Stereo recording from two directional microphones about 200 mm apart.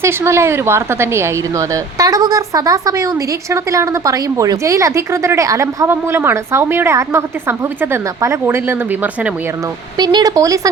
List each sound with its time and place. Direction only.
0.0 s a woman's voice: 15° right (ahead or behind)
10.0 s speech: 20° right (ahead or behind)